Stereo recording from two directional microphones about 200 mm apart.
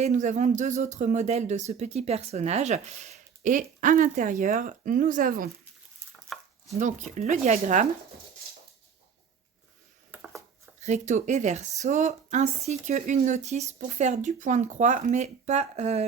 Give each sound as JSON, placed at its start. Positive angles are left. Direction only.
{"t": 0.0, "sound": "speech", "side_deg": -35}
{"t": 7.2, "sound": "speech", "side_deg": -35}
{"t": 10.1, "sound": "a sound", "side_deg": -10}
{"t": 10.8, "sound": "speech", "side_deg": -35}